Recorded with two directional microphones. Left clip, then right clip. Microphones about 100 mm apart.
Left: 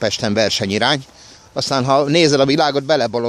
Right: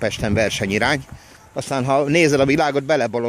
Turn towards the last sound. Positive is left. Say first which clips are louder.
# left 2 dB
turn(degrees=15)  # may be behind; listen again after turning